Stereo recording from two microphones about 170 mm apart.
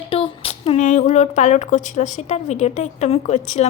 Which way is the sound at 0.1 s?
35° left (ahead or behind).